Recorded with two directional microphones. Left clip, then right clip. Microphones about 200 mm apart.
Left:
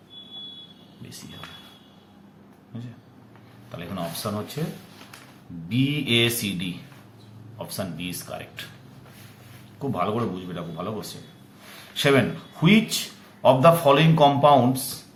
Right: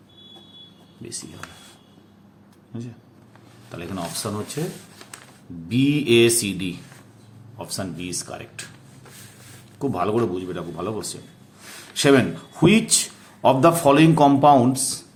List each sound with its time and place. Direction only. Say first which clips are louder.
3.7 s a man's voice: right 2 dB; 45° right (ahead or behind)
5.6 s a man's voice: right 5 dB; 45° right (ahead or behind)
9.7 s a man's voice: right 3 dB; 40° right (ahead or behind)